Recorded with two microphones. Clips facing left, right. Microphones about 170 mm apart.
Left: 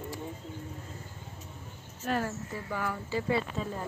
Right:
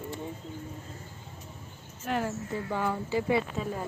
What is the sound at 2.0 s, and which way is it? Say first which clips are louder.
Speech: right 1 dB; 15° right (ahead or behind).